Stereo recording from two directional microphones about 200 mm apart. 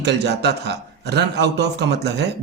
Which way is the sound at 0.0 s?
55° right (ahead or behind).